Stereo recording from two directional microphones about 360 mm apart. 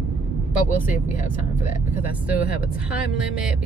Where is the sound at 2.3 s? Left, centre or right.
Centre.